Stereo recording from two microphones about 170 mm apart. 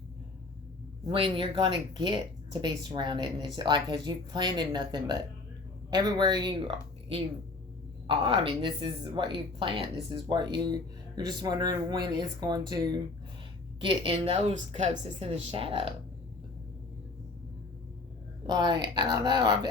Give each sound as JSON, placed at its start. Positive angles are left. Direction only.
{"t": 1.0, "sound": "speech", "side_deg": -30}
{"t": 18.4, "sound": "speech", "side_deg": -25}